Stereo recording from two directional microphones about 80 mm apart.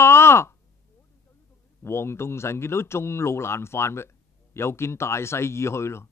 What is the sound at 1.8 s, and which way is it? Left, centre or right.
Speech, left.